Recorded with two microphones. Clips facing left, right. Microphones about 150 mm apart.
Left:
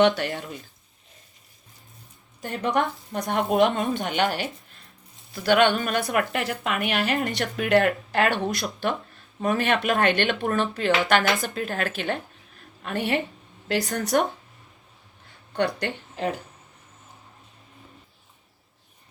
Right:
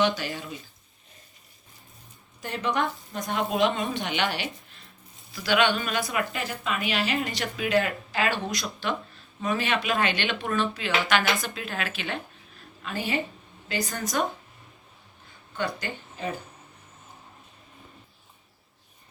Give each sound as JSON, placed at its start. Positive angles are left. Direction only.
{"t": 0.0, "sound": "speech", "side_deg": 65}
{"t": 2.4, "sound": "speech", "side_deg": 50}
{"t": 12.8, "sound": "a woman's voice", "side_deg": 65}
{"t": 15.5, "sound": "speech", "side_deg": 75}